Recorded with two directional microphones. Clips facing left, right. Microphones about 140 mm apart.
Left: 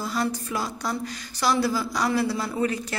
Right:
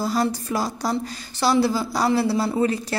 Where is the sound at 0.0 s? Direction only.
35° right (ahead or behind).